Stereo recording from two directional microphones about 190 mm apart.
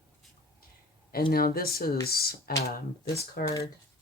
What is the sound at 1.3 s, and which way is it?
Speech, 50° left (ahead or behind).